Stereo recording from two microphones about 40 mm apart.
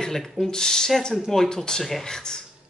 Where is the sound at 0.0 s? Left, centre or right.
Centre.